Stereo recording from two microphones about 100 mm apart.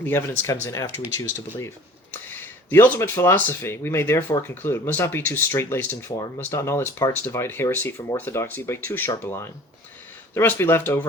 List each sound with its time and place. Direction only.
0.0 s speech: 25° left (ahead or behind)